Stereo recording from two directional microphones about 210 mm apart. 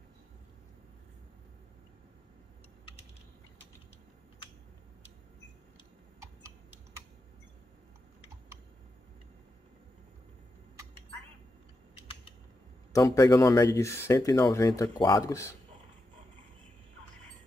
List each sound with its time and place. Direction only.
12.9 s speech: 15° left (ahead or behind)